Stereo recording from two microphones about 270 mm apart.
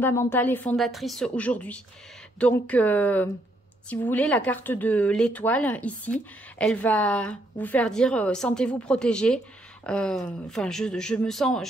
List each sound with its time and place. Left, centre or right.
0.0 s a woman's voice: centre